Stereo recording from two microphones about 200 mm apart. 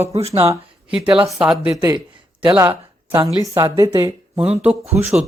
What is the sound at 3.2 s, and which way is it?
Speech, 15° right (ahead or behind).